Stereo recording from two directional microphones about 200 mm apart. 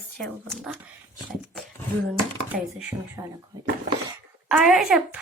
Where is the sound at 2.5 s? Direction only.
50° right (ahead or behind).